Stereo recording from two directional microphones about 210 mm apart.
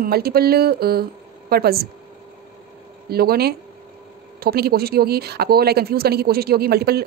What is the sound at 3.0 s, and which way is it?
Speech, 45° right (ahead or behind).